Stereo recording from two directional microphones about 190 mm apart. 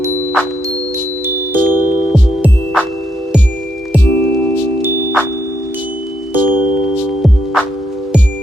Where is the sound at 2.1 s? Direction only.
Centre (ahead or behind).